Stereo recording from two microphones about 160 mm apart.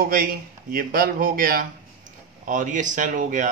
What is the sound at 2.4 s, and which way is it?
Speech, 50° right (ahead or behind).